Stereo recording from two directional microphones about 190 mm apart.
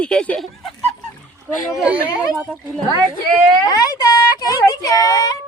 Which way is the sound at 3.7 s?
20° left (ahead or behind).